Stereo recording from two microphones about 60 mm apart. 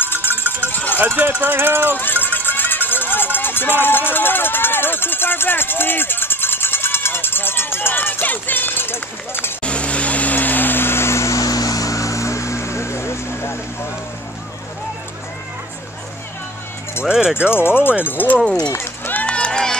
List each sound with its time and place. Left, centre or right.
0.0 s cowbell: left
0.9 s speech: right
2.0 s music: left
9.6 s vehicle: centre; by 13.6 s left
17.0 s speech: centre
17.5 s speech: left
18.4 s speech: centre
18.7 s run: left
19.2 s run: centre